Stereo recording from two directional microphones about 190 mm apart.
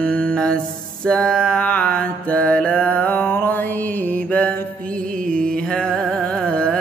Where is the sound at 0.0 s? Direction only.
5° left (ahead or behind).